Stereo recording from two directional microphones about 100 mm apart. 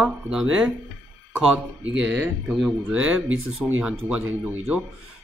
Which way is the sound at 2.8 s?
15° right (ahead or behind).